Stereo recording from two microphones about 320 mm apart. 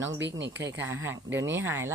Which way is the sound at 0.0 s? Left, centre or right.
Right.